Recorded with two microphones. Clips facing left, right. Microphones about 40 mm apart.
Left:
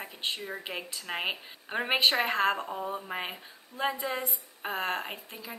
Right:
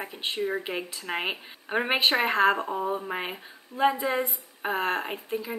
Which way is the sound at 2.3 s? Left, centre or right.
Centre.